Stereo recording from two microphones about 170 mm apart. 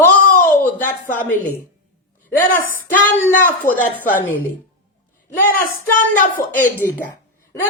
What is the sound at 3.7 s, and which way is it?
Speech, 10° left (ahead or behind).